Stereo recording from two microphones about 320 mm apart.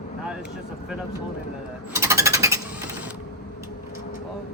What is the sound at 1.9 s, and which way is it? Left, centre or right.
Jackhammer, centre.